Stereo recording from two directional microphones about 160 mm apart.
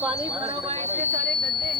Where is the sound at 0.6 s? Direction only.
40° right (ahead or behind).